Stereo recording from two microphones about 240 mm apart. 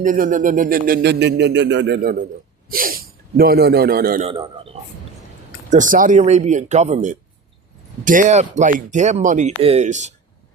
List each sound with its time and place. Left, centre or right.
0.0 s speech: right
4.2 s speech: right
5.7 s speech: right